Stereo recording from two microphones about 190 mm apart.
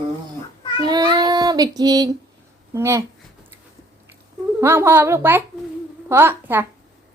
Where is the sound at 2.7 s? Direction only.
15° right (ahead or behind).